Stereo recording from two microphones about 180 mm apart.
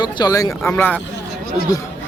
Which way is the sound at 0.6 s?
5° left (ahead or behind).